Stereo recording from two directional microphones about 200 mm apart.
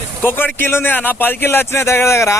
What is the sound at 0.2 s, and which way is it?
Speech, 10° left (ahead or behind).